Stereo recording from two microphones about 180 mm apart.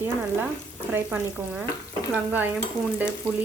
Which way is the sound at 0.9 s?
10° right (ahead or behind).